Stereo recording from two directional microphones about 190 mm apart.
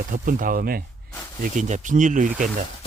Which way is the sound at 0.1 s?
45° right (ahead or behind).